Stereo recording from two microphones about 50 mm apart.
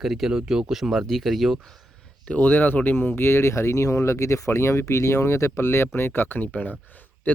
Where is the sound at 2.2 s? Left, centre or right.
Left.